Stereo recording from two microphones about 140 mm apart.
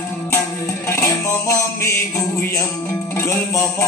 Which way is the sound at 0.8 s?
20° left (ahead or behind).